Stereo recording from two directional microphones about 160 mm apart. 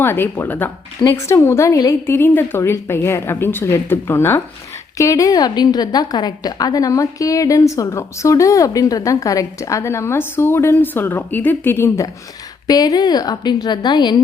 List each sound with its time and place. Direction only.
0.0 s a woman's voice: 15° left (ahead or behind)